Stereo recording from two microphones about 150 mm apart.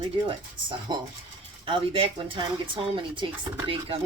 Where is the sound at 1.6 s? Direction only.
35° right (ahead or behind).